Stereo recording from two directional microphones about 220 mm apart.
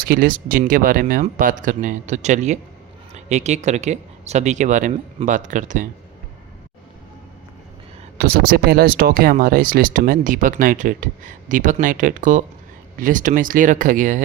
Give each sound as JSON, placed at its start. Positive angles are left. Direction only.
{"t": 0.0, "sound": "speech", "side_deg": -40}
{"t": 8.2, "sound": "speech", "side_deg": -45}